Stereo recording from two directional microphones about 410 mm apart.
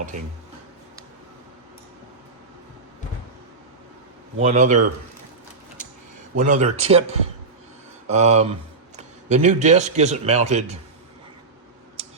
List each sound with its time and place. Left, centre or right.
4.4 s a man's voice: centre
6.3 s a man's voice: centre